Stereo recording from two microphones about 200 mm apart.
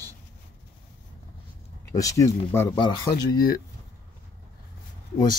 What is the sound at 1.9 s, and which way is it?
Speech, 15° left (ahead or behind).